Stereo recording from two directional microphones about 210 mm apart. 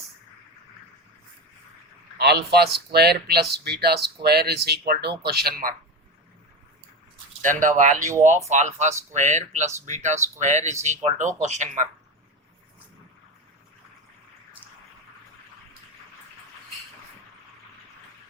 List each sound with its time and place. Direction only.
2.1 s speech: 50° right (ahead or behind)
7.4 s speech: 40° right (ahead or behind)